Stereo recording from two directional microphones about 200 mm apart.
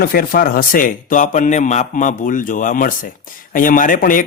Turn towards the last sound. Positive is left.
turn(degrees=45)  # may be behind; listen again after turning